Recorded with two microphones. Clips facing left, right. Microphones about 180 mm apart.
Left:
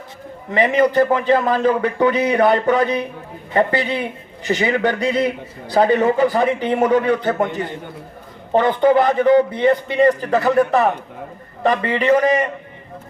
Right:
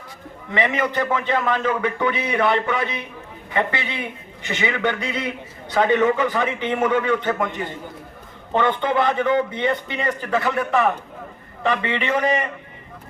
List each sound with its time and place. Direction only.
0.5 s a man's voice: 35° left (ahead or behind)